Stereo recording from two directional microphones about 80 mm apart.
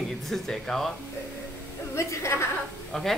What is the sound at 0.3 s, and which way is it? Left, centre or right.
Speech, centre.